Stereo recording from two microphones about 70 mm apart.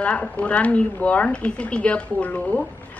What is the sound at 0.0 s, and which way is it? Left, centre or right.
A woman's voice, centre.